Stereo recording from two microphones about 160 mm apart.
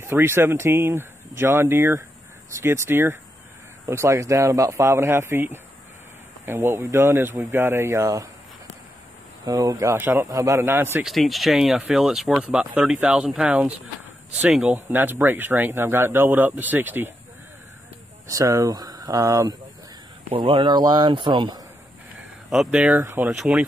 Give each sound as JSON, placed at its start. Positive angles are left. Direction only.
{"t": 0.0, "sound": "speech", "side_deg": -15}
{"t": 9.5, "sound": "speech", "side_deg": -20}
{"t": 11.1, "sound": "speech", "side_deg": 0}
{"t": 18.3, "sound": "a man's voice", "side_deg": -20}
{"t": 20.2, "sound": "a man's voice", "side_deg": -30}
{"t": 22.5, "sound": "speech", "side_deg": -5}